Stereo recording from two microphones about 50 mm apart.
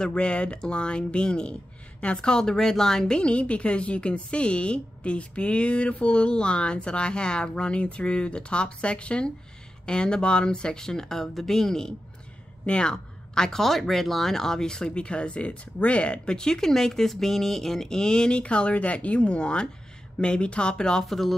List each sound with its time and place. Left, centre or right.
0.0 s a woman's voice: centre
21.0 s speech: centre